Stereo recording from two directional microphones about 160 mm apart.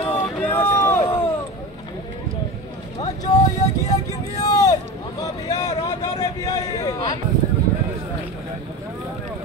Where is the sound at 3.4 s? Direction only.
45° left (ahead or behind).